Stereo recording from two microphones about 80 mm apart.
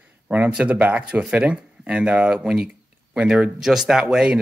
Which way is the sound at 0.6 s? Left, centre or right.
Centre.